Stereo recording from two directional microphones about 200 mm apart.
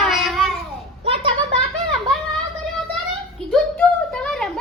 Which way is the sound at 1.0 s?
30° right (ahead or behind).